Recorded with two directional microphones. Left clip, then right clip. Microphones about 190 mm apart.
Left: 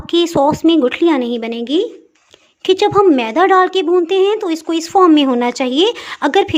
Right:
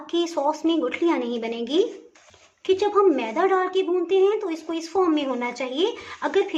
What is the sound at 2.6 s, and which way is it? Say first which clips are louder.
A woman's voice: left 8 dB; 55° left (ahead or behind).